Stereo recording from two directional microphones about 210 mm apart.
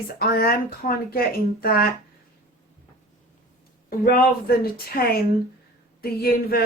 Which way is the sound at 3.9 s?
45° left (ahead or behind).